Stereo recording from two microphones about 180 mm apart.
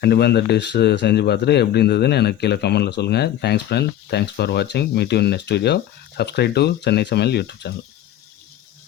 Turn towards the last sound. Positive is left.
turn(degrees=65)  # may be behind; listen again after turning